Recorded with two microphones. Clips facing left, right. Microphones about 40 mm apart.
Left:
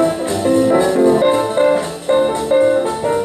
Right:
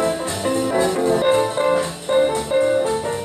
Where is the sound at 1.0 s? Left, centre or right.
Centre.